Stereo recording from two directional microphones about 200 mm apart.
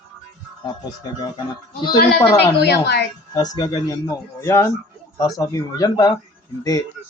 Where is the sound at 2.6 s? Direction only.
55° left (ahead or behind).